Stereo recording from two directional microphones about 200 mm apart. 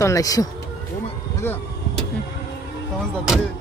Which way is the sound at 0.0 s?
15° left (ahead or behind).